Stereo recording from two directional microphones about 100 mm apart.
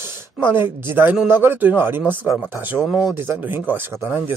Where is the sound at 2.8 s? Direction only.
Centre (ahead or behind).